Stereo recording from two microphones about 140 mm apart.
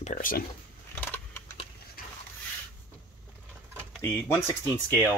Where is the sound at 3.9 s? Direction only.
10° left (ahead or behind).